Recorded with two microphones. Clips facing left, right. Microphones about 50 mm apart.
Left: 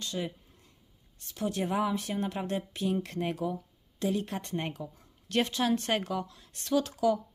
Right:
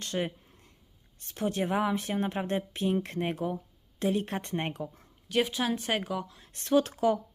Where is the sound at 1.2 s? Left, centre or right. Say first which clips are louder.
Right 2 dB; right.